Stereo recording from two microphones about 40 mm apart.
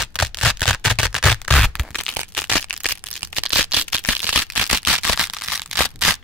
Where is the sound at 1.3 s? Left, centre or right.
Centre.